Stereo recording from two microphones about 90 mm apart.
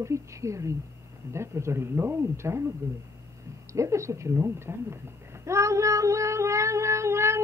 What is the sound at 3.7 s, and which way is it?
Speech, 35° right (ahead or behind).